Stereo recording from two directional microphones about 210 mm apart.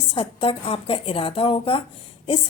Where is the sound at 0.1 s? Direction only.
25° left (ahead or behind).